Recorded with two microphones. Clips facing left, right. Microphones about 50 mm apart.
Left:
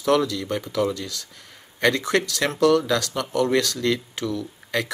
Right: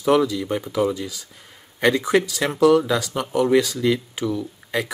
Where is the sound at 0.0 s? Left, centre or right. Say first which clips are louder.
Right 2 dB; centre.